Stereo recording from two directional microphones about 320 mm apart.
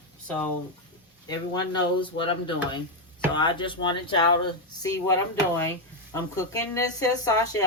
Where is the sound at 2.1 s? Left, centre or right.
Centre.